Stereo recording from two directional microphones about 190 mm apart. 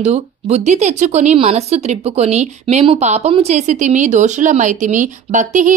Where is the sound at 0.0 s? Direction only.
35° right (ahead or behind).